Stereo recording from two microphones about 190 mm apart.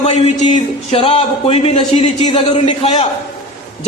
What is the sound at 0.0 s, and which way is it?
Speech, 35° left (ahead or behind).